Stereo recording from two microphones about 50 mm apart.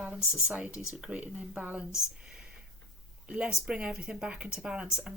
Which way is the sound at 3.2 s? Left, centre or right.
Right.